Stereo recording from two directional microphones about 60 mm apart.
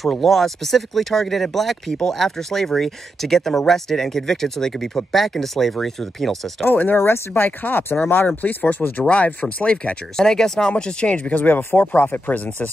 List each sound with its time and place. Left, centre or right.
0.0 s speech: centre
6.6 s speech: left
10.1 s speech: centre; by 12.6 s left